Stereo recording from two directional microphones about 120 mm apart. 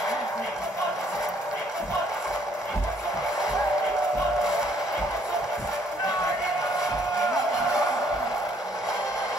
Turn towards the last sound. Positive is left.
turn(degrees=25)  # may be behind; listen again after turning